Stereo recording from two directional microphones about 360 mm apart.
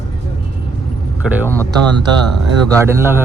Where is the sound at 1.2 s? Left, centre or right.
Centre.